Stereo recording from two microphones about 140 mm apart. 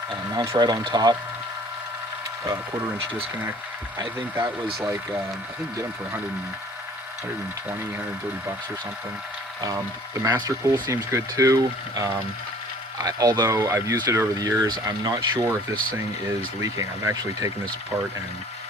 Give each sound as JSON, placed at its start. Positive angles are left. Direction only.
{"t": 0.3, "sound": "speech", "side_deg": -25}
{"t": 4.4, "sound": "speech", "side_deg": -20}
{"t": 10.2, "sound": "speech", "side_deg": -25}
{"t": 16.6, "sound": "speech", "side_deg": -20}